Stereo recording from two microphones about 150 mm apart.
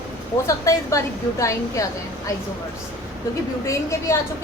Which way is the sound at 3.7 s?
20° left (ahead or behind).